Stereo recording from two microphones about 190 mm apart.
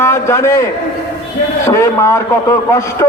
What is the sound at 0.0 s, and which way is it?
A man's voice, 15° left (ahead or behind).